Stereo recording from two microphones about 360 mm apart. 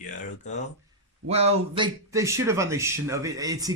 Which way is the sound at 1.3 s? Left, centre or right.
Centre.